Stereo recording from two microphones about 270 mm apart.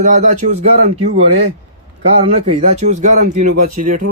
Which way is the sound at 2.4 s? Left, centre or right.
Right.